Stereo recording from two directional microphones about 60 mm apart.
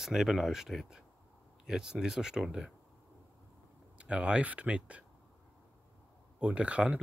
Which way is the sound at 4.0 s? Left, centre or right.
Centre.